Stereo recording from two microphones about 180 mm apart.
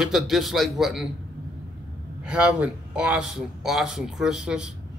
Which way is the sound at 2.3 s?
5° right (ahead or behind).